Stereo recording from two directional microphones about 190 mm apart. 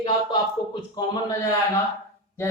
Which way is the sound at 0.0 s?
25° left (ahead or behind).